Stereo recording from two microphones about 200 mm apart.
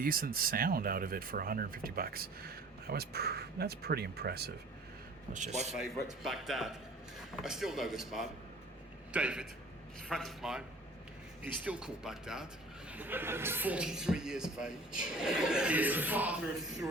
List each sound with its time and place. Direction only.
0.0 s speech: 45° right (ahead or behind)
5.3 s a man's voice: 35° right (ahead or behind)
5.7 s a man's voice: centre (ahead or behind)
11.6 s a man's voice: 5° right (ahead or behind)